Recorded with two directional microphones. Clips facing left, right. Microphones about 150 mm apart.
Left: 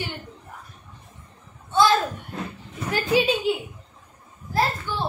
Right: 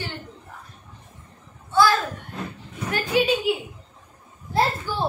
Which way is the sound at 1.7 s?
20° left (ahead or behind).